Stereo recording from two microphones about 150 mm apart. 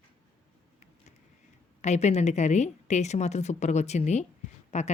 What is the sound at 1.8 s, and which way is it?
Speech, 50° left (ahead or behind).